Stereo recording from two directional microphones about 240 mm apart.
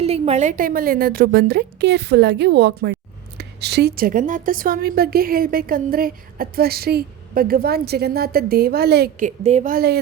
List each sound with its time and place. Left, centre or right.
0.0 s a woman's voice: right